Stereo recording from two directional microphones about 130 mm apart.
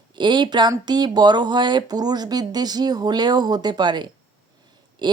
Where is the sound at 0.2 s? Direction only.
35° right (ahead or behind).